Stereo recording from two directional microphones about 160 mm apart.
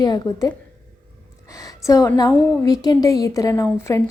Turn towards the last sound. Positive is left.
turn(degrees=20)  # may be behind; listen again after turning